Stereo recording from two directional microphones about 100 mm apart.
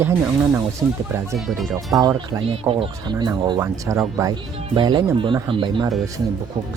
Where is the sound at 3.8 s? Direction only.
35° right (ahead or behind).